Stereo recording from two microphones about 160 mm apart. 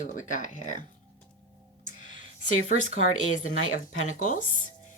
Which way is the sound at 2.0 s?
50° left (ahead or behind).